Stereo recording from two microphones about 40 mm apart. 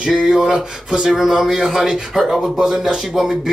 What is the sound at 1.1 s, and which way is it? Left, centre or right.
Speech, centre.